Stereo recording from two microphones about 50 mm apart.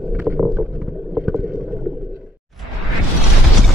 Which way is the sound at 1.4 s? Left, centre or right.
Right.